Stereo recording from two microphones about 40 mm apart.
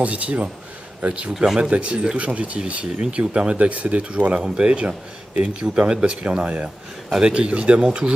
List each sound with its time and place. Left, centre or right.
0.0 s speech: right
1.3 s speech: centre
1.6 s speech: right
4.3 s speech: right
7.8 s speech: centre